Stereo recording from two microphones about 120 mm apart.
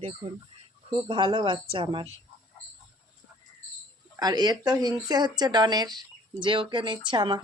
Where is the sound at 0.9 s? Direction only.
45° right (ahead or behind).